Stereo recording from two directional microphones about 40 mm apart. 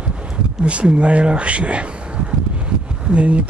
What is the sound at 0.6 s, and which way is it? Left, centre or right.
Speech, right.